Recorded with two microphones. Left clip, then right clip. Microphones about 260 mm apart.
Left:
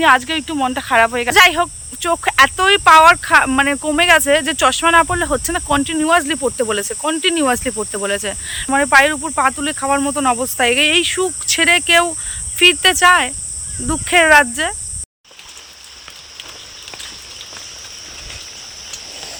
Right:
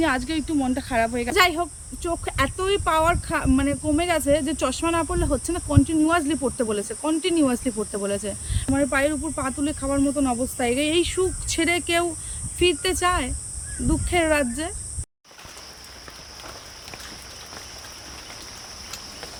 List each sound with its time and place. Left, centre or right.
0.0 s cricket: centre